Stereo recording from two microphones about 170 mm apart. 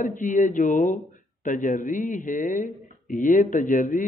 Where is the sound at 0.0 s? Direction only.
50° left (ahead or behind).